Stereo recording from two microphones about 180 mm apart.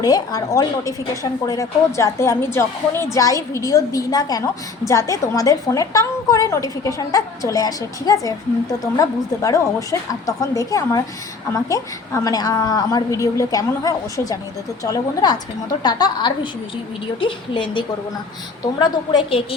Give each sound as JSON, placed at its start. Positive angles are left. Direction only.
{"t": 0.0, "sound": "a woman's voice", "side_deg": 20}